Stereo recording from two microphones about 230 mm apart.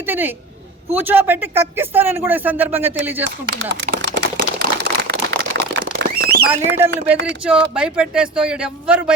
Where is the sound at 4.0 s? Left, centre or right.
Right.